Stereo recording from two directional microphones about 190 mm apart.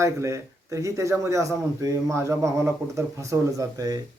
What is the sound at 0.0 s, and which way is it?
Speech, 15° right (ahead or behind).